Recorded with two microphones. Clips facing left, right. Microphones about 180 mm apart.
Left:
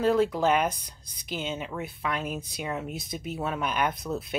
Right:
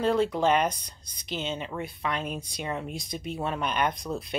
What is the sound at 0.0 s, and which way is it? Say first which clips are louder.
Speech: left 1 dB; 5° left (ahead or behind).